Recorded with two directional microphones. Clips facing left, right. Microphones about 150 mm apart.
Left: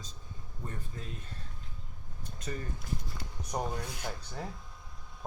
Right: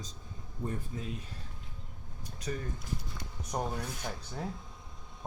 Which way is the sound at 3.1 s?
5° left (ahead or behind).